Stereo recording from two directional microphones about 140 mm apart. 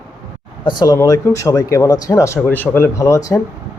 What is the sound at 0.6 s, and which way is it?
Speech, 30° left (ahead or behind).